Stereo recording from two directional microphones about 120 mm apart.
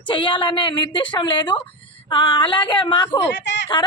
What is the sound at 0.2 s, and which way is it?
A woman's voice, 40° left (ahead or behind).